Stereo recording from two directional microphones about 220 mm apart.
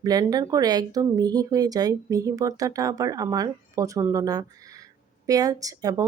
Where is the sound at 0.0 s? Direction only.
15° right (ahead or behind).